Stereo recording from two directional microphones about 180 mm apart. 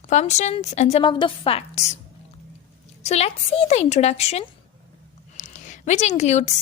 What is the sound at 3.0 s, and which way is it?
A woman's voice, 40° left (ahead or behind).